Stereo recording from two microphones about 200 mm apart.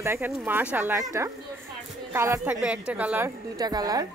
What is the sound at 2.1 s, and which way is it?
A woman's voice, 10° right (ahead or behind).